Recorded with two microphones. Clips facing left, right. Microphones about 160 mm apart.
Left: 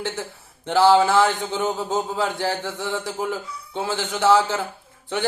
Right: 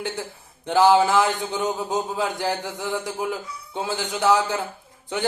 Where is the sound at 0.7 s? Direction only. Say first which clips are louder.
Left 1 dB; 15° right (ahead or behind).